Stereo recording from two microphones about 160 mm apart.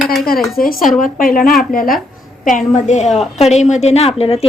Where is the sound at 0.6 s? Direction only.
60° left (ahead or behind).